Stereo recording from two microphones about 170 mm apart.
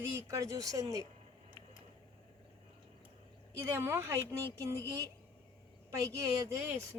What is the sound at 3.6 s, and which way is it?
Speech, 15° right (ahead or behind).